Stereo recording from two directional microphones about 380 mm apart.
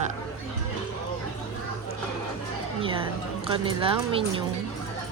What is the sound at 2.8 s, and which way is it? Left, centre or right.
Speech, centre.